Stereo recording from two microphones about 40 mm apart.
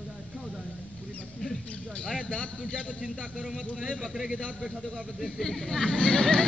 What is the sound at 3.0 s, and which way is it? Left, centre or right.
A man's voice, right.